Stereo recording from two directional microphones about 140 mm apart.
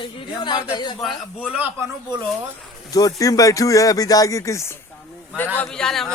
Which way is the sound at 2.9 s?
25° left (ahead or behind).